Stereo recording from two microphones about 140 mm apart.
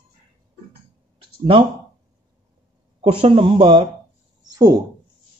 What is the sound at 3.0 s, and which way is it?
Speech, 40° right (ahead or behind).